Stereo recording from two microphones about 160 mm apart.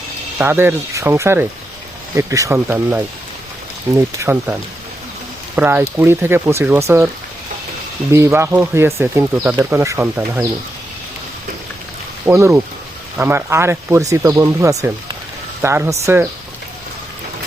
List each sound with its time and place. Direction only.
0.3 s speech: 15° right (ahead or behind)
5.5 s speech: 10° right (ahead or behind)
8.1 s speech: 15° right (ahead or behind)
12.2 s speech: 15° right (ahead or behind)